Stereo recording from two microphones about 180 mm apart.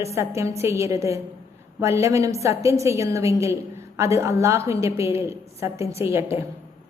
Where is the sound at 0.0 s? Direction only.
15° right (ahead or behind).